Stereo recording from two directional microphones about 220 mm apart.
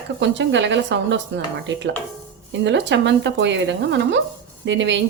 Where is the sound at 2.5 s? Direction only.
55° right (ahead or behind).